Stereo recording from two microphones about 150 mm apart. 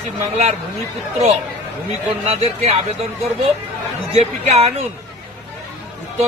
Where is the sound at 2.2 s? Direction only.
40° right (ahead or behind).